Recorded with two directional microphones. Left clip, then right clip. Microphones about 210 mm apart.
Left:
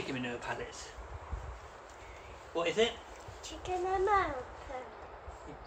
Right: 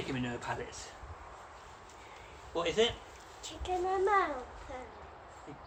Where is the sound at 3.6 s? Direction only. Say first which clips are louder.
Right 1 dB; 15° right (ahead or behind).